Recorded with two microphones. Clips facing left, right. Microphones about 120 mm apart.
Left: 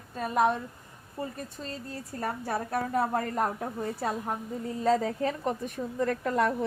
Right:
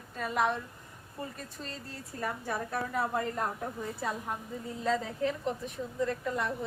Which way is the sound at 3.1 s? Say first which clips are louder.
Left 3 dB; 50° left (ahead or behind).